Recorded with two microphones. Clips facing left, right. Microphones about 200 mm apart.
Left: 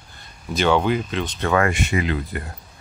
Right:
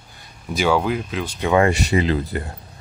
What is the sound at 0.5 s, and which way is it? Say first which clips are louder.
Speech: left 1 dB; 5° right (ahead or behind).